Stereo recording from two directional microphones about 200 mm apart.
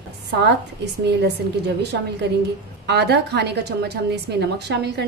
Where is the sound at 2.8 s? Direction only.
55° right (ahead or behind).